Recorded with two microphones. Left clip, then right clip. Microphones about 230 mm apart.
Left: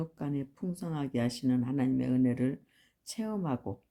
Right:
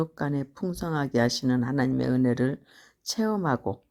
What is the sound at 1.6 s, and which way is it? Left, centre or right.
Speech, right.